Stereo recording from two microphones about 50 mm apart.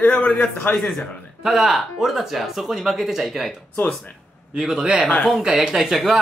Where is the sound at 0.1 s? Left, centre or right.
Left.